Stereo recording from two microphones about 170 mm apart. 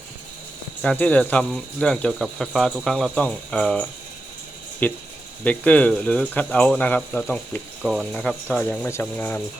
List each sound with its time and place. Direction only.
0.8 s speech: 5° left (ahead or behind)
7.8 s speech: 5° right (ahead or behind)